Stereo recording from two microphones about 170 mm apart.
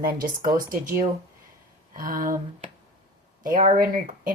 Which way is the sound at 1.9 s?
55° right (ahead or behind).